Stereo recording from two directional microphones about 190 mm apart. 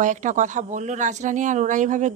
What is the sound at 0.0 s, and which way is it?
Speech, 40° right (ahead or behind).